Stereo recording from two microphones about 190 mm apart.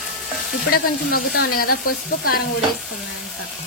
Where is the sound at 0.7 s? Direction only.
55° left (ahead or behind).